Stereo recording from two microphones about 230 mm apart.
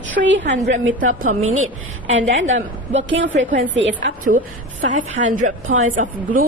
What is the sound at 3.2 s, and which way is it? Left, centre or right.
Speech, right.